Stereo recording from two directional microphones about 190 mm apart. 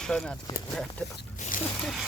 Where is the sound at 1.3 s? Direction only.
45° left (ahead or behind).